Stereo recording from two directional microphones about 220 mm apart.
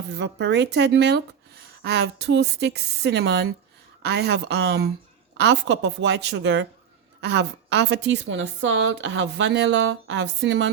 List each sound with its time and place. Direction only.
0.1 s a woman's voice: 50° right (ahead or behind)